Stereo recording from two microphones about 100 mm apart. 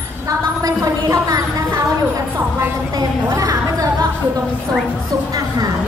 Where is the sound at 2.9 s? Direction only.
35° right (ahead or behind).